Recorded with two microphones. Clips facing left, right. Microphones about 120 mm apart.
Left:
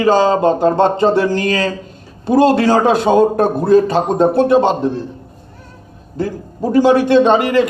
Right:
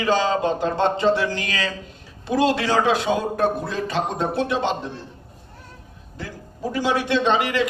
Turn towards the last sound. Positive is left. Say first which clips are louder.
# left 9 dB
turn(degrees=45)  # may be behind; listen again after turning